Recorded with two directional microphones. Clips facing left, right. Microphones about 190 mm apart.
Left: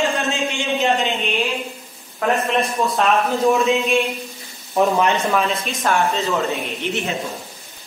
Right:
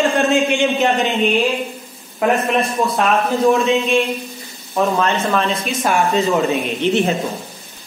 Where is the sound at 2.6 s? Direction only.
Centre (ahead or behind).